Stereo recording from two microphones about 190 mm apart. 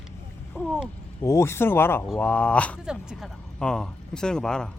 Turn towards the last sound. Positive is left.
turn(degrees=5)  # may be behind; listen again after turning